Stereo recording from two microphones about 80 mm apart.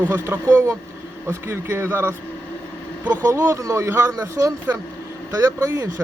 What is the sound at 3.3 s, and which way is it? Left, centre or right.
Speech, right.